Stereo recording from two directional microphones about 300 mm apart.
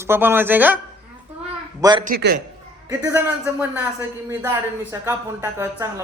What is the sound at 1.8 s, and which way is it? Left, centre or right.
Speech, centre.